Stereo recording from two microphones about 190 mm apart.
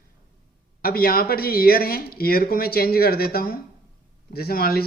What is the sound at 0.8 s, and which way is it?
A man's voice, 50° left (ahead or behind).